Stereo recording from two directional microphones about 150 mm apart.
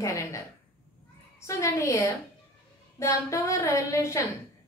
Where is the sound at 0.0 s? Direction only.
20° left (ahead or behind).